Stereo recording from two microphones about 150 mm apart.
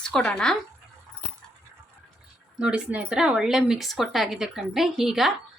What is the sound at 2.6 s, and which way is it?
A woman's voice, 5° right (ahead or behind).